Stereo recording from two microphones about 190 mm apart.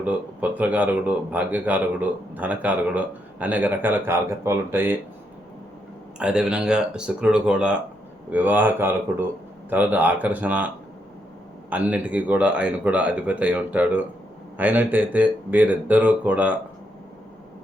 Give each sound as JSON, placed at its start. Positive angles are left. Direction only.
{"t": 0.0, "sound": "speech", "side_deg": -10}
{"t": 6.1, "sound": "speech", "side_deg": -5}
{"t": 11.7, "sound": "speech", "side_deg": -10}